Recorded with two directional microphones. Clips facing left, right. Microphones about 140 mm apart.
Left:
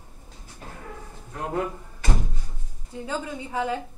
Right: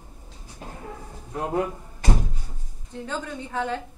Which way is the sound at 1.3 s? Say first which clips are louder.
Right 3 dB; 20° right (ahead or behind).